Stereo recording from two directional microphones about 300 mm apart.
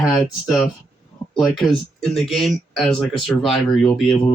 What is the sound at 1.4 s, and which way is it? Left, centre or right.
Speech, centre.